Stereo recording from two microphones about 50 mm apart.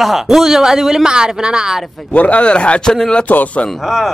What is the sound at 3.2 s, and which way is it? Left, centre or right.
Speech, left.